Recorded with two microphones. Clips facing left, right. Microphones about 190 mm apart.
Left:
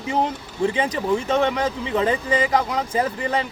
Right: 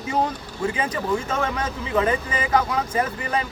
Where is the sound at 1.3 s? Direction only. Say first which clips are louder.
Left 5 dB; 25° left (ahead or behind).